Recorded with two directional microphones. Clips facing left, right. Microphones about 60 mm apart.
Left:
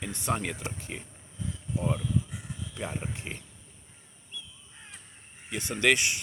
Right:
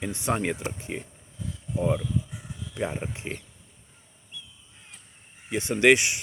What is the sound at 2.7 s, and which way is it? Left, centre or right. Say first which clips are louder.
Speech: right 6 dB; right.